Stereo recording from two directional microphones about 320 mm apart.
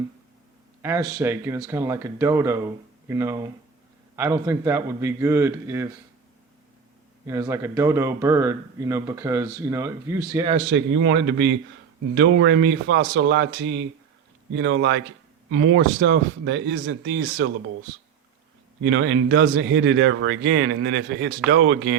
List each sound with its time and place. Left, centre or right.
0.8 s a man's voice: centre
7.3 s a man's voice: centre
10.5 s speech: right
18.9 s speech: right